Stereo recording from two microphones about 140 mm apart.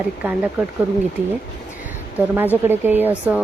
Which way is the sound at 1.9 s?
10° right (ahead or behind).